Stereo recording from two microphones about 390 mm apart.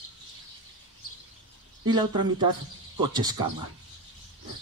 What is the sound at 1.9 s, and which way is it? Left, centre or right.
Speech, centre.